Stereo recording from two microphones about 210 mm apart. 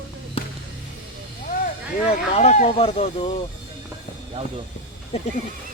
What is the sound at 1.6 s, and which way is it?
Speech, 30° left (ahead or behind).